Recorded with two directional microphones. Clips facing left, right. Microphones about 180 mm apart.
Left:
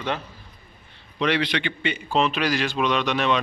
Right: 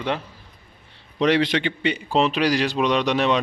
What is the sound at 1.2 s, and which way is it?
A man's voice, 40° right (ahead or behind).